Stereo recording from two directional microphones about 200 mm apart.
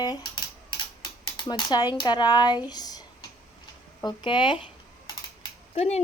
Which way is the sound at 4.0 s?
20° left (ahead or behind).